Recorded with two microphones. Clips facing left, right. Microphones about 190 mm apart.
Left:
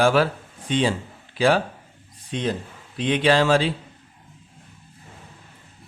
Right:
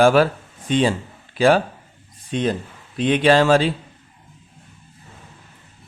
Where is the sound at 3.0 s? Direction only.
50° right (ahead or behind).